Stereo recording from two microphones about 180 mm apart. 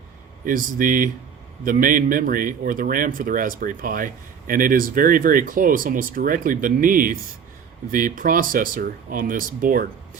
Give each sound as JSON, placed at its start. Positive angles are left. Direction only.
{"t": 0.4, "sound": "speech", "side_deg": -50}